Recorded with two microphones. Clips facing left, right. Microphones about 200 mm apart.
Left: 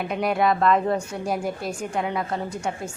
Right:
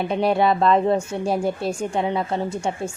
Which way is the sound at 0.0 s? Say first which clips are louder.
Right 3 dB; 30° right (ahead or behind).